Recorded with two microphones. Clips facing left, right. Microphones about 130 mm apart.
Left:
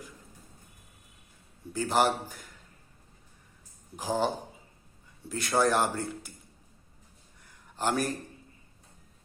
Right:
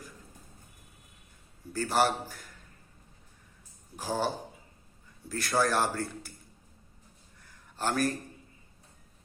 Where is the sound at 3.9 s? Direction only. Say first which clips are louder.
Left 2 dB; 15° left (ahead or behind).